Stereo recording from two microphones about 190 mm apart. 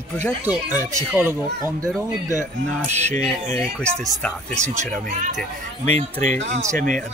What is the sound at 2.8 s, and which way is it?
Speech, 35° right (ahead or behind).